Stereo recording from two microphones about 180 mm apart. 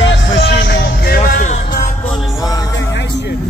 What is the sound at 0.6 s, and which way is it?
Music, 60° left (ahead or behind).